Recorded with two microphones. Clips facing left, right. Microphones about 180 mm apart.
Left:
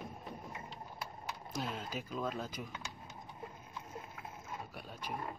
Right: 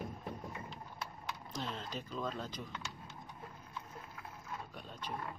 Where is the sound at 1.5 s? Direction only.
10° left (ahead or behind).